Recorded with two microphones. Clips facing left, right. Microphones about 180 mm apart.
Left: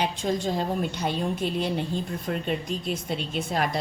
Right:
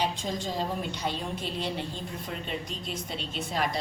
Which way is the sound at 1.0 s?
50° left (ahead or behind).